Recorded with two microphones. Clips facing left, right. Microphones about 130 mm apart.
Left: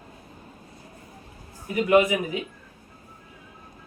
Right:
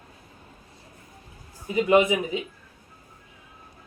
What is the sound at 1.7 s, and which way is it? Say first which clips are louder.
Speech: even; 20° right (ahead or behind).